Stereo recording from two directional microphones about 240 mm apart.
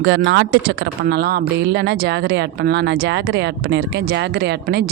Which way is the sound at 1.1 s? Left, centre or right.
Right.